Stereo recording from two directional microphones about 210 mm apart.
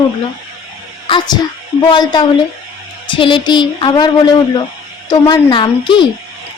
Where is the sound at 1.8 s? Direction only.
20° left (ahead or behind).